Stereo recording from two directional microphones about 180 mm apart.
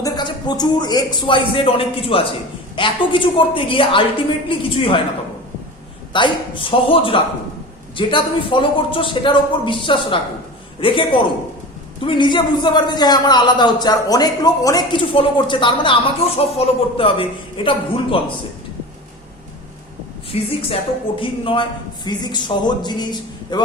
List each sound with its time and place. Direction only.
0.0 s a man's voice: 25° left (ahead or behind)
6.1 s a man's voice: 25° left (ahead or behind)
20.3 s a woman's voice: 30° left (ahead or behind)